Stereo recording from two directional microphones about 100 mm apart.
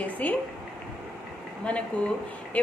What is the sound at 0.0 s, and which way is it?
Speech, 15° left (ahead or behind).